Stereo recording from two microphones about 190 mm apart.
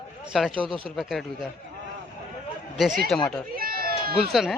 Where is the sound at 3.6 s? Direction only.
50° right (ahead or behind).